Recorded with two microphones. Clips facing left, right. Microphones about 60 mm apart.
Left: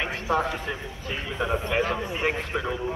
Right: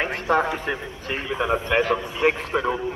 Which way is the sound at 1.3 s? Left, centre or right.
Right.